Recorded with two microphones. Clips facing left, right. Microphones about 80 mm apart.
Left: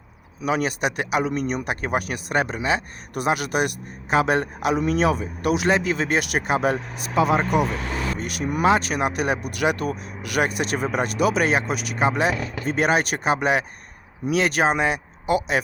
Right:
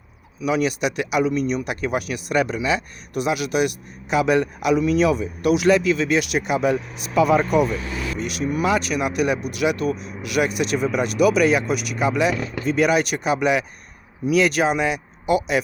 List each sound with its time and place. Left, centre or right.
0.4 s speech: left
7.3 s speech: left
7.7 s speech: left
8.6 s speech: left
9.4 s speech: left